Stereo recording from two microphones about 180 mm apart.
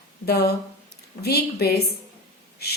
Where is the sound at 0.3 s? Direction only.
65° left (ahead or behind).